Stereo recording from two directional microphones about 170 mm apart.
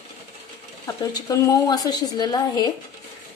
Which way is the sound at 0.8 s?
20° left (ahead or behind).